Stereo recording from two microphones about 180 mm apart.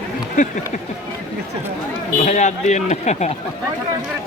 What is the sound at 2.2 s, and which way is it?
A man's voice, 40° left (ahead or behind).